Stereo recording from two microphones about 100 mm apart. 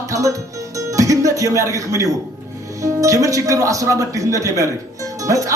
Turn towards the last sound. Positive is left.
turn(degrees=-35)  # may be behind; listen again after turning